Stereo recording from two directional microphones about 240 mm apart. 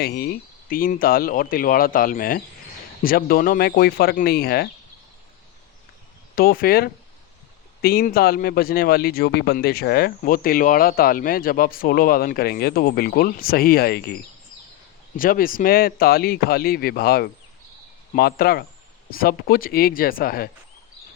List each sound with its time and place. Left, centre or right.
0.0 s a man's voice: left
6.3 s a man's voice: left
15.1 s a man's voice: left